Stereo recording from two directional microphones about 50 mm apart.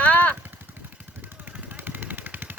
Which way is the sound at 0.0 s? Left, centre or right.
Left.